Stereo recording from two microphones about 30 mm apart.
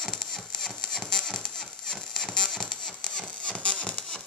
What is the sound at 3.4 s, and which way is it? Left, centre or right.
Music, left.